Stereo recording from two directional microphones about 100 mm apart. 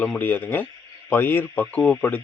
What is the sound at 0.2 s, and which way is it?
Speech, 20° left (ahead or behind).